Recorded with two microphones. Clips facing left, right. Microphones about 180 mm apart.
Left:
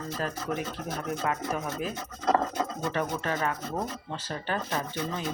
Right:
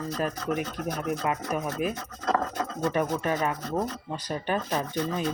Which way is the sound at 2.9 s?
15° right (ahead or behind).